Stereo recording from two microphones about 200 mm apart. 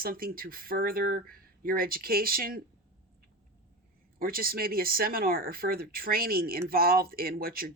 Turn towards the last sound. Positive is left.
turn(degrees=-45)  # may be behind; listen again after turning